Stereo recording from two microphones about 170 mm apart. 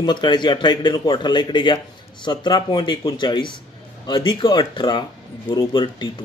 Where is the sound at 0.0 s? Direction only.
25° left (ahead or behind).